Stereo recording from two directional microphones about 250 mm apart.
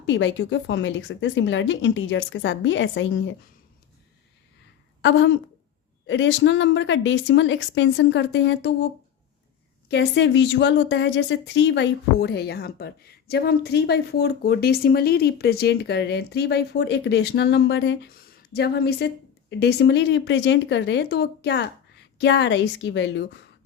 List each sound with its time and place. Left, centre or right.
0.0 s a woman's voice: left
5.0 s a woman's voice: left
9.9 s a woman's voice: left